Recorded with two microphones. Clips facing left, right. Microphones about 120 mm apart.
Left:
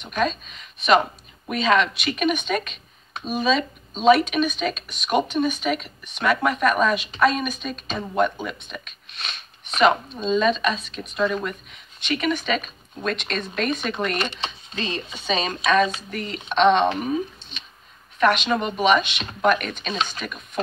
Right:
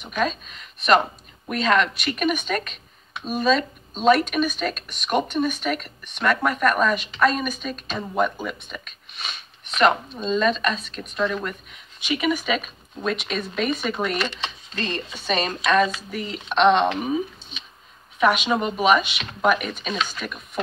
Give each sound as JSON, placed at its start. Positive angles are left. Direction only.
{"t": 0.0, "sound": "speech", "side_deg": 0}
{"t": 14.1, "sound": "speech", "side_deg": 20}
{"t": 14.8, "sound": "speech", "side_deg": 0}
{"t": 17.0, "sound": "a sound", "side_deg": -10}
{"t": 18.2, "sound": "speech", "side_deg": -10}